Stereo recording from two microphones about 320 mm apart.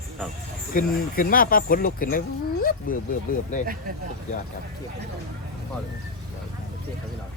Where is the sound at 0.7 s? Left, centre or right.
Left.